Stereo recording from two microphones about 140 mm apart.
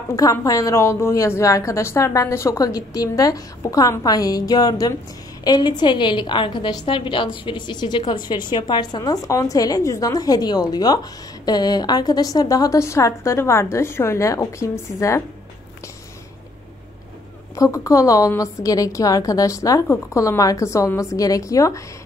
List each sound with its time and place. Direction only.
0.1 s a woman's voice: 25° left (ahead or behind)
17.6 s a woman's voice: 20° left (ahead or behind)